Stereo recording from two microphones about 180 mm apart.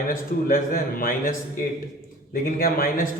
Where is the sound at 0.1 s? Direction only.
50° left (ahead or behind).